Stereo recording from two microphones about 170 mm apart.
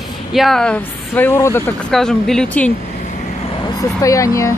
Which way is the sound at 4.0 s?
20° left (ahead or behind).